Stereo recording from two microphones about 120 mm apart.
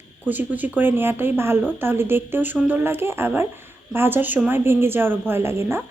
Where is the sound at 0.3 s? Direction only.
15° right (ahead or behind).